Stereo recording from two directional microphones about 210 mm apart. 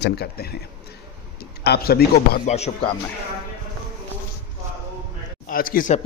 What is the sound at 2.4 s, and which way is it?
Speech, 30° left (ahead or behind).